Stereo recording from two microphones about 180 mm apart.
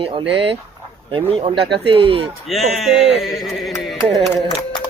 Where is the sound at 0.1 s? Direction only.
30° right (ahead or behind).